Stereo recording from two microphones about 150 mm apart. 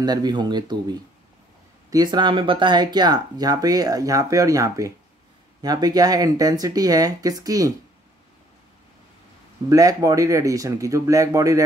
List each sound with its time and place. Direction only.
0.0 s speech: 25° right (ahead or behind)
9.7 s speech: 25° right (ahead or behind)